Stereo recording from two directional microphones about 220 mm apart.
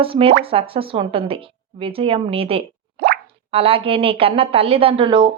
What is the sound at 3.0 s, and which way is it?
Plop, 50° right (ahead or behind).